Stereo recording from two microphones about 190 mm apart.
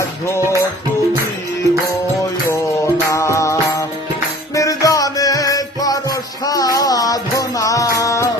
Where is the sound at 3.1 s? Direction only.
15° left (ahead or behind).